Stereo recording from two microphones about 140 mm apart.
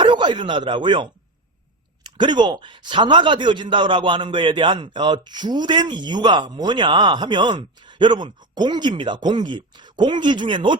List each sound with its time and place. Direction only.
0.0 s speech: 35° right (ahead or behind)
2.1 s speech: 35° right (ahead or behind)